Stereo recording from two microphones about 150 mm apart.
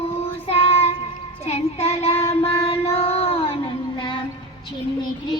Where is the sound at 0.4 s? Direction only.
40° left (ahead or behind).